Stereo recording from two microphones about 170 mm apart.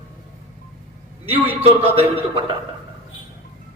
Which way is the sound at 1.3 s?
35° right (ahead or behind).